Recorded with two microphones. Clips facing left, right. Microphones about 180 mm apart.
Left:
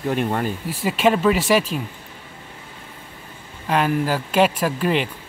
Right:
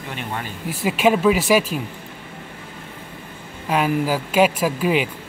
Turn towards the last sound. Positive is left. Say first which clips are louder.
# right 1 dB
turn(degrees=-5)  # may be behind; listen again after turning